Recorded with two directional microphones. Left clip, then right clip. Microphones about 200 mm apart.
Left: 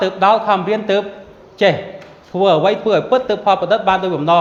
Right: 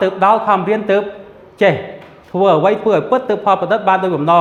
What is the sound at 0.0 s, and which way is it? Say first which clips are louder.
A man's voice: right 1 dB; 25° right (ahead or behind).